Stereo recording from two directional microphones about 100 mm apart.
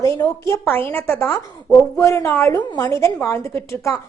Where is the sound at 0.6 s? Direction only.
20° left (ahead or behind).